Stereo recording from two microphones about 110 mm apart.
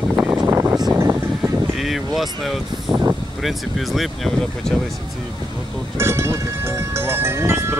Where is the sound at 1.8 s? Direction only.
Centre (ahead or behind).